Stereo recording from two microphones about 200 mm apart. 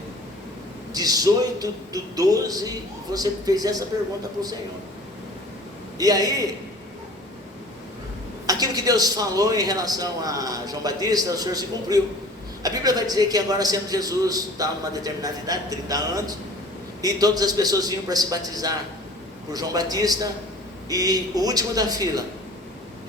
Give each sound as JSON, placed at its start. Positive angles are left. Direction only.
{"t": 0.9, "sound": "a man's voice", "side_deg": -20}
{"t": 6.0, "sound": "a man's voice", "side_deg": -20}
{"t": 8.4, "sound": "a man's voice", "side_deg": -20}